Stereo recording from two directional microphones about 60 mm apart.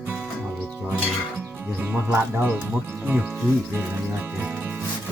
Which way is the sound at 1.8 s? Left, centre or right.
Right.